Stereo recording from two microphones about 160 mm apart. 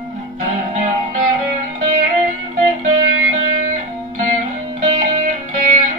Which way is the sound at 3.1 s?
55° right (ahead or behind).